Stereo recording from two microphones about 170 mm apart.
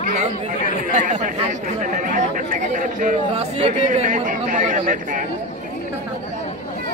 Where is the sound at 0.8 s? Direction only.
45° right (ahead or behind).